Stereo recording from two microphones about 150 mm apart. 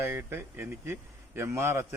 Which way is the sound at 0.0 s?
15° right (ahead or behind).